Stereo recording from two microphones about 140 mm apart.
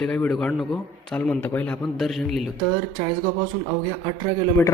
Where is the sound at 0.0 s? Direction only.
5° left (ahead or behind).